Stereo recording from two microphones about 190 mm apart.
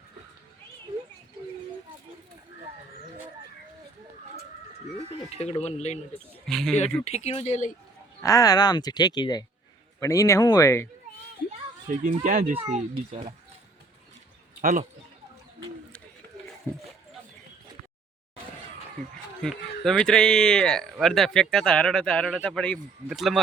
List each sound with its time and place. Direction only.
5.3 s speech: 35° left (ahead or behind)
6.4 s speech: centre (ahead or behind)
6.7 s speech: 35° left (ahead or behind)
8.2 s speech: 15° left (ahead or behind)
12.2 s speech: 45° right (ahead or behind)
12.5 s a child's voice: 30° right (ahead or behind)
14.6 s speech: 45° right (ahead or behind)
19.4 s speech: centre (ahead or behind)